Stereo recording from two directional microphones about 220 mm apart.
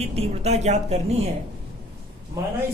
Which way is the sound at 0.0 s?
30° right (ahead or behind).